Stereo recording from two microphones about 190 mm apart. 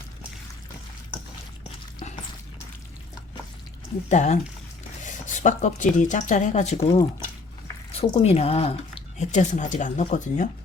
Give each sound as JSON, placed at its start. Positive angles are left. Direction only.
{"t": 4.1, "sound": "speech", "side_deg": 40}